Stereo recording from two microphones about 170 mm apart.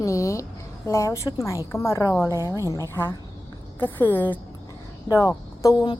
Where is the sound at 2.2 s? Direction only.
15° right (ahead or behind).